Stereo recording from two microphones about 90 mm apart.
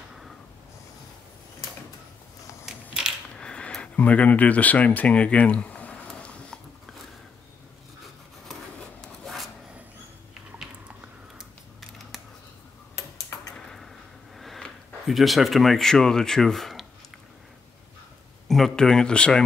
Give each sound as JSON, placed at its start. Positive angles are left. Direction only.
{"t": 2.6, "sound": "crushing", "side_deg": -5}
{"t": 3.3, "sound": "a sound", "side_deg": 10}
{"t": 9.0, "sound": "rub", "side_deg": 0}
{"t": 11.3, "sound": "typing", "side_deg": 0}
{"t": 12.9, "sound": "tick-tock", "side_deg": 35}
{"t": 14.3, "sound": "speech", "side_deg": 0}
{"t": 18.5, "sound": "speech", "side_deg": 5}